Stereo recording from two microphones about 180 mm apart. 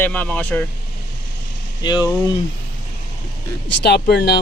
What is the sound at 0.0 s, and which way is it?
Speech, 10° left (ahead or behind).